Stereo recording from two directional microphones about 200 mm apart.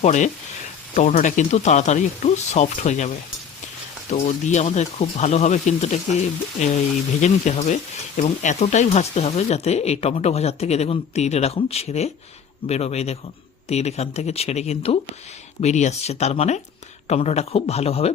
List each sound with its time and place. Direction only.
0.0 s speech: 35° left (ahead or behind)
4.1 s speech: 35° left (ahead or behind)